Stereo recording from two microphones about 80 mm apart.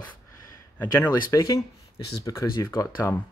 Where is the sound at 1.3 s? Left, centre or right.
Left.